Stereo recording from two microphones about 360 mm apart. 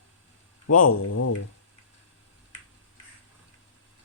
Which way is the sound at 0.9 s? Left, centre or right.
Left.